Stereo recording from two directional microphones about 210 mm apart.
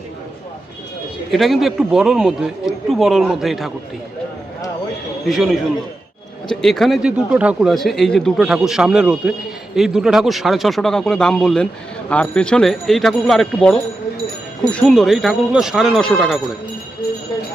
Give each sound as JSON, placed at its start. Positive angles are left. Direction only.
{"t": 1.3, "sound": "speech", "side_deg": 0}
{"t": 5.2, "sound": "speech", "side_deg": 0}